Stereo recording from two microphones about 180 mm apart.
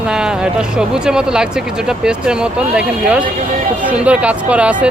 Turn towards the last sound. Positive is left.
turn(degrees=-5)  # may be behind; listen again after turning